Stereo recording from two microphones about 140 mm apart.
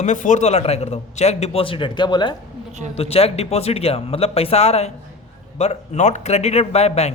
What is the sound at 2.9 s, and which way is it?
A man's voice, 45° left (ahead or behind).